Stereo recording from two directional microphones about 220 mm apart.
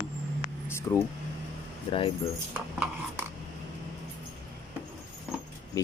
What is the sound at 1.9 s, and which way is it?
Speech, 25° left (ahead or behind).